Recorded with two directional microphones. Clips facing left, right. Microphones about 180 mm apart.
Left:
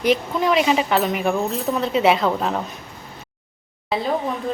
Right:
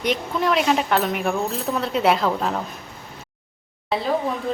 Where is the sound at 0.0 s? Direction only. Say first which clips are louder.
Left 3 dB; centre (ahead or behind).